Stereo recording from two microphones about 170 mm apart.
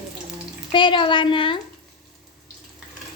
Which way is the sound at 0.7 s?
30° left (ahead or behind).